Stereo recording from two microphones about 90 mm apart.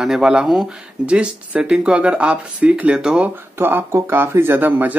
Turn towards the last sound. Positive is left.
turn(degrees=-20)  # may be behind; listen again after turning